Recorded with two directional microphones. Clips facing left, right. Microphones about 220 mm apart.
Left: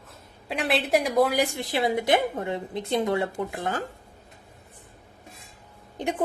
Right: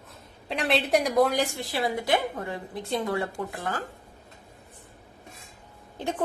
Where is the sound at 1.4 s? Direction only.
20° left (ahead or behind).